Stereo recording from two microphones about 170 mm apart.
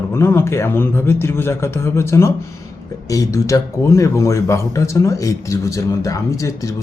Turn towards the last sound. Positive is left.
turn(degrees=20)  # may be behind; listen again after turning